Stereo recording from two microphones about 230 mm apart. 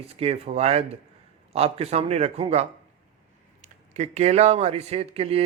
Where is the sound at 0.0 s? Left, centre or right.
Right.